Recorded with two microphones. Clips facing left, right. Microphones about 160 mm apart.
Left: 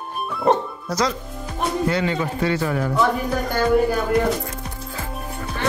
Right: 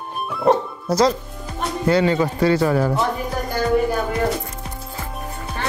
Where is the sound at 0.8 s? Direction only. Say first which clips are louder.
Right 7 dB; 30° right (ahead or behind).